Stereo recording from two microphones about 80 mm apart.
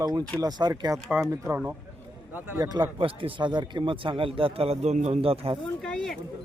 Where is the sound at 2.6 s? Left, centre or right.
Right.